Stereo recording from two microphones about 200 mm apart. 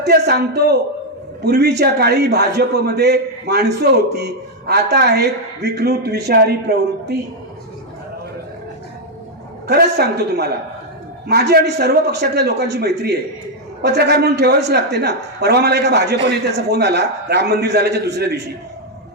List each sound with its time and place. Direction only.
0.0 s a man's voice: 55° right (ahead or behind)
9.6 s a man's voice: 55° right (ahead or behind)